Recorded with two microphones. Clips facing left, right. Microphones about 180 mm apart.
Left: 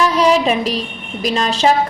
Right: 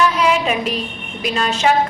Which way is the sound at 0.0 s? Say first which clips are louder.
Left 3 dB; 35° left (ahead or behind).